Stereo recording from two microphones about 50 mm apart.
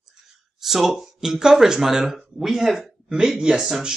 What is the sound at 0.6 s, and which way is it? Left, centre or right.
A man's voice, centre.